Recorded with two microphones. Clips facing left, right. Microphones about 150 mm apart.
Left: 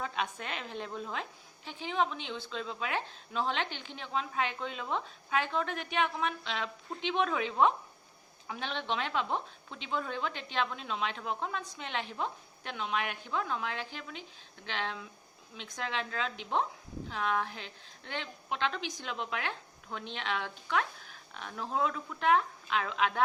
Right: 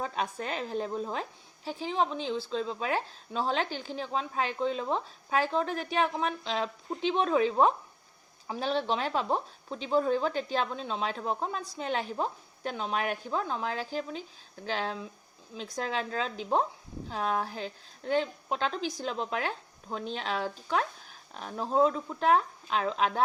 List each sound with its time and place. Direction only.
0.0 s a woman's voice: 35° right (ahead or behind)